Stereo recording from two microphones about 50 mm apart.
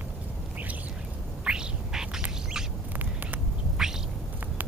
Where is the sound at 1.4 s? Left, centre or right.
Centre.